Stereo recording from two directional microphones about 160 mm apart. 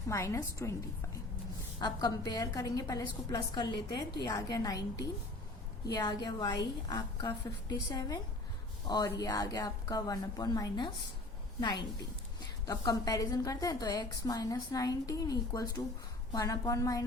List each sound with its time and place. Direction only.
0.1 s a woman's voice: 15° left (ahead or behind)
1.8 s a woman's voice: 25° left (ahead or behind)
5.8 s a woman's voice: 25° left (ahead or behind)
12.6 s a woman's voice: 25° left (ahead or behind)